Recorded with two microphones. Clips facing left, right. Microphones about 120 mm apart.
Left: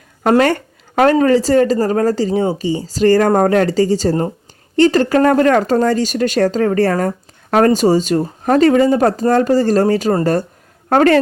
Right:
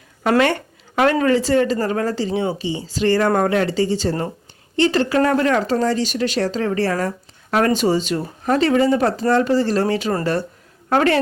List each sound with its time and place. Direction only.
0.2 s a woman's voice: 40° left (ahead or behind)